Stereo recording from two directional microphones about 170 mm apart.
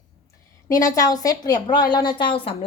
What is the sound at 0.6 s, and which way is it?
A woman's voice, 20° left (ahead or behind).